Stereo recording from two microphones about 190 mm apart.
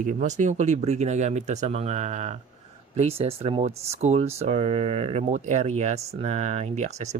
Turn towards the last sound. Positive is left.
turn(degrees=-35)  # may be behind; listen again after turning